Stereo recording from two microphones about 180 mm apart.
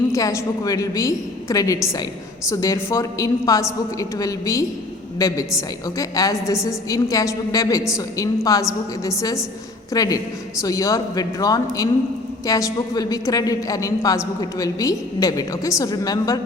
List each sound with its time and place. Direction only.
0.1 s a woman's voice: 15° left (ahead or behind)